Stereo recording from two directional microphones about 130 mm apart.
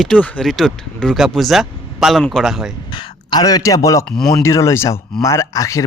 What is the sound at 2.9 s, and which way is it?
Speech, 35° left (ahead or behind).